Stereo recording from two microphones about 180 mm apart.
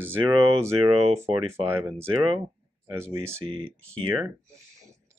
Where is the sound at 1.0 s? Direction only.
35° right (ahead or behind).